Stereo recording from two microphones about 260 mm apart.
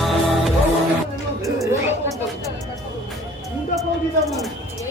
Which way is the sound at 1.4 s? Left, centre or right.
Centre.